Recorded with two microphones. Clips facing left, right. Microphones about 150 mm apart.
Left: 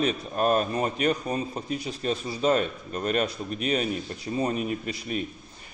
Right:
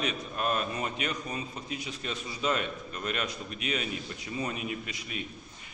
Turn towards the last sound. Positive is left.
turn(degrees=40)  # may be behind; listen again after turning